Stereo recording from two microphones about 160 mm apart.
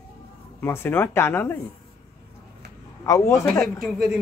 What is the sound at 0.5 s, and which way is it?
Speech, 15° left (ahead or behind).